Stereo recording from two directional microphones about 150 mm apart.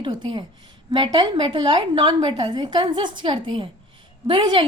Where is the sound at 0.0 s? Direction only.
30° right (ahead or behind).